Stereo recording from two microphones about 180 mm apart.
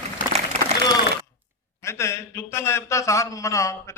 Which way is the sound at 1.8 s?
15° left (ahead or behind).